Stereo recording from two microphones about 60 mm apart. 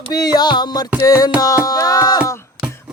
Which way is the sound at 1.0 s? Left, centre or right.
Left.